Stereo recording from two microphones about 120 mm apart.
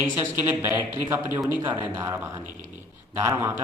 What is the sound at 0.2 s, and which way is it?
A man's voice, 20° right (ahead or behind).